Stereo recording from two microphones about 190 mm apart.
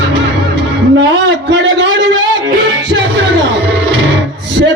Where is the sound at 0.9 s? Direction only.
70° right (ahead or behind).